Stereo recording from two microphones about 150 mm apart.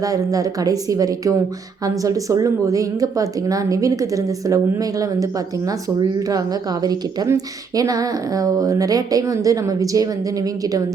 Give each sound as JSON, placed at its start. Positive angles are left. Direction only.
{"t": 0.0, "sound": "a woman's voice", "side_deg": -25}